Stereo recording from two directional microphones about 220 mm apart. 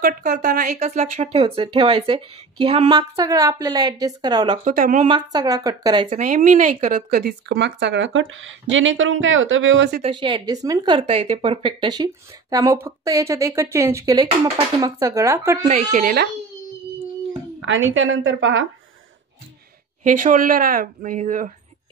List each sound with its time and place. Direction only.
0.0 s a woman's voice: 40° right (ahead or behind); by 4.6 s 20° right (ahead or behind)
4.6 s speech: 35° right (ahead or behind)
5.0 s a woman's voice: 20° right (ahead or behind)
6.1 s speech: 35° right (ahead or behind); by 9.8 s 60° right (ahead or behind)
10.0 s a woman's voice: 20° right (ahead or behind)
15.7 s speech: 40° right (ahead or behind)
17.6 s speech: 60° right (ahead or behind)
20.0 s speech: 35° right (ahead or behind)